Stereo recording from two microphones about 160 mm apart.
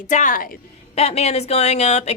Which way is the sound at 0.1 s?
55° left (ahead or behind).